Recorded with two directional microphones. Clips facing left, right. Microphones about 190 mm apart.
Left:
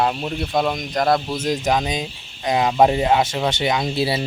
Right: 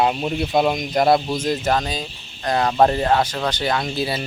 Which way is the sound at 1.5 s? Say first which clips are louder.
Left 2 dB; 10° left (ahead or behind).